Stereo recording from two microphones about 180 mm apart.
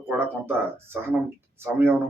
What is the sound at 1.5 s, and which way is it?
Speech, 15° right (ahead or behind).